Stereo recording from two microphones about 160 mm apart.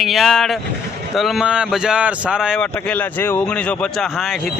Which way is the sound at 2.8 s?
10° left (ahead or behind).